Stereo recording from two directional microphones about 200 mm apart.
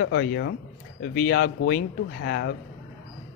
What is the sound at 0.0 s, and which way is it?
Speech, 60° left (ahead or behind).